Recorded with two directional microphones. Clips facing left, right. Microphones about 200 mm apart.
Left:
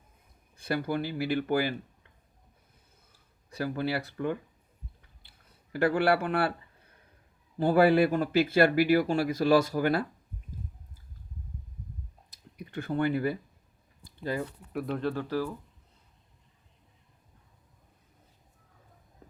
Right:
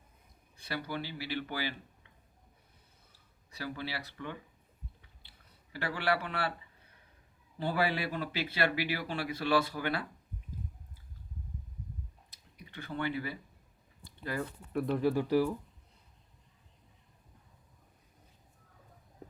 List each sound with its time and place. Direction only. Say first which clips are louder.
0.5 s speech: left 8 dB; 45° left (ahead or behind)
3.1 s a sound: left 13 dB; 50° left (ahead or behind)
5.7 s speech: left 8 dB; 50° left (ahead or behind)
7.6 s speech: left 11 dB; 45° left (ahead or behind)
12.3 s a sound: left 11 dB; 45° left (ahead or behind)
14.7 s speech: right 2 dB; centre (ahead or behind)
15.1 s speech: right 3 dB; 15° right (ahead or behind)